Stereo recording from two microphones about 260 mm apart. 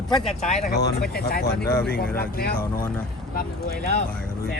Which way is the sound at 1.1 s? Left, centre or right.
Left.